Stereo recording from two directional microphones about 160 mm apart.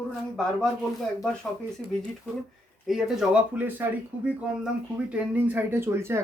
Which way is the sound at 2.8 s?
5° right (ahead or behind).